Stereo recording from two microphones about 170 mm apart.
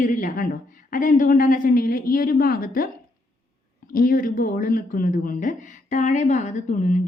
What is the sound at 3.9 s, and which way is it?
Speech, 55° left (ahead or behind).